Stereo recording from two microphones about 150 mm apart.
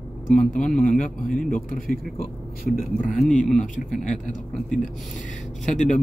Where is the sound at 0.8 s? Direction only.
60° left (ahead or behind).